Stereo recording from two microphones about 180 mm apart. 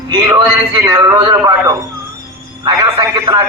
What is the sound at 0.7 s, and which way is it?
A man's voice, 20° right (ahead or behind).